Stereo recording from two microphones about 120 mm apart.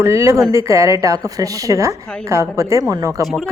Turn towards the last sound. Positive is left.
turn(degrees=-30)  # may be behind; listen again after turning